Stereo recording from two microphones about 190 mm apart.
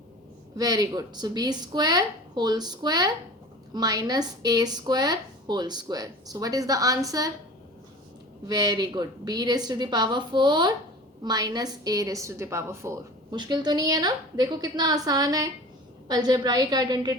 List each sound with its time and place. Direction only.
0.5 s a woman's voice: 20° right (ahead or behind)
8.4 s a woman's voice: 20° right (ahead or behind)